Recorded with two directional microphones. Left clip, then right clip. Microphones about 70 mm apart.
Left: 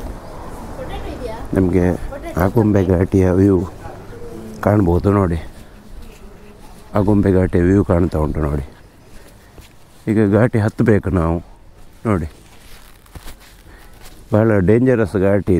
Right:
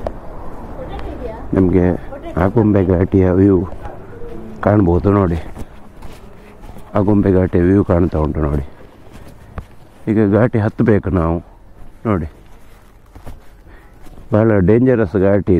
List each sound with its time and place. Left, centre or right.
0.1 s a sound: left
6.9 s speech: left
10.0 s speech: left
14.3 s speech: left